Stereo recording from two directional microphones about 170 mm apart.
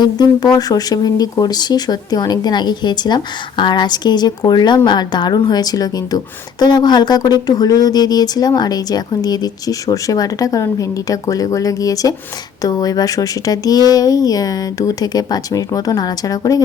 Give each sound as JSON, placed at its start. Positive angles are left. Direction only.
{"t": 0.0, "sound": "a woman's voice", "side_deg": 25}